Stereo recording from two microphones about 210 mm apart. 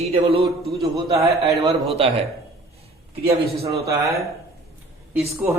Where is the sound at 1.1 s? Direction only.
15° right (ahead or behind).